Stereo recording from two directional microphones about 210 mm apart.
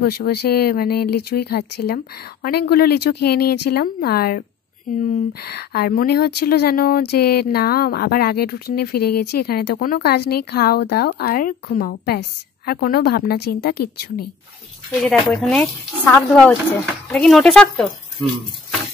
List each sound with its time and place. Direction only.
0.0 s speech: 50° left (ahead or behind)
15.3 s speech: 5° left (ahead or behind)